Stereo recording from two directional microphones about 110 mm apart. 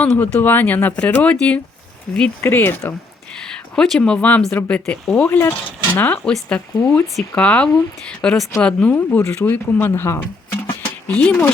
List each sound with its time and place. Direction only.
0.0 s speech: 15° left (ahead or behind)
2.4 s speech: 20° left (ahead or behind)
3.4 s speech: 5° left (ahead or behind)